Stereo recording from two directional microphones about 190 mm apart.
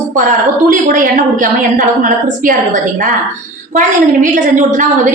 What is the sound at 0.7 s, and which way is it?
A woman's voice, 45° right (ahead or behind).